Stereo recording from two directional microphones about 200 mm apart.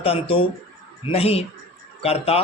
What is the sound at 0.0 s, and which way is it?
A man's voice, 30° left (ahead or behind).